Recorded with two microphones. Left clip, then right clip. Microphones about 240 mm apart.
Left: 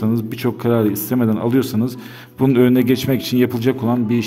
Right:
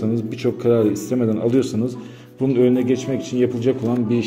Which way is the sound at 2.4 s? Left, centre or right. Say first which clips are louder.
Left 2 dB; left.